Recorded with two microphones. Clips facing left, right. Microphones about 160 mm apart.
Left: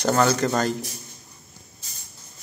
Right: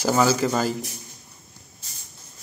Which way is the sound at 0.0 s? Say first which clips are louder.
Even; 5° right (ahead or behind).